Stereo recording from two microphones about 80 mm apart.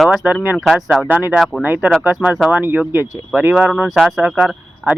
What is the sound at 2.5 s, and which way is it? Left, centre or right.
Speech, right.